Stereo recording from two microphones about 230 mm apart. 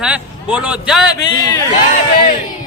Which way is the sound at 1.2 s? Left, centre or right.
Centre.